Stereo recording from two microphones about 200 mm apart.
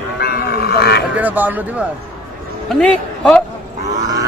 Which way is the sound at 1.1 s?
10° right (ahead or behind).